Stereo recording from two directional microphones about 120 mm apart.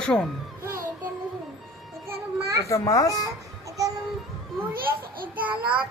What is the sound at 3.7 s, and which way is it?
Babbling, 30° right (ahead or behind).